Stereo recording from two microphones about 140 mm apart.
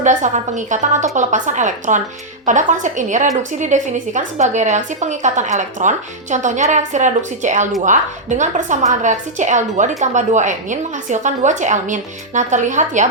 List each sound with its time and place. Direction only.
0.0 s a woman's voice: 60° right (ahead or behind)